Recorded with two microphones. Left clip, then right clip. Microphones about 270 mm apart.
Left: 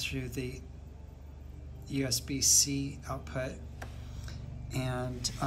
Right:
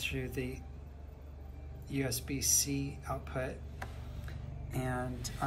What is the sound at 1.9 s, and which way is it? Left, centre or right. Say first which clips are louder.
Speech: left 3 dB; centre.